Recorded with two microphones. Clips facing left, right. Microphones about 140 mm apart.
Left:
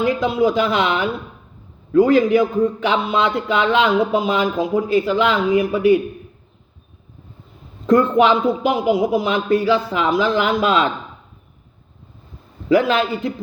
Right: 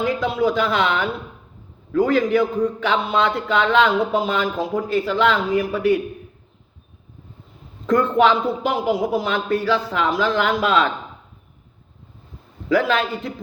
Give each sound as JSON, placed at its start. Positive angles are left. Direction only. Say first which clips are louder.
{"t": 0.0, "sound": "a man's voice", "louder": "left 3 dB", "side_deg": 15}
{"t": 7.9, "sound": "a man's voice", "louder": "left 2 dB", "side_deg": 15}
{"t": 12.6, "sound": "a man's voice", "louder": "left 3 dB", "side_deg": 20}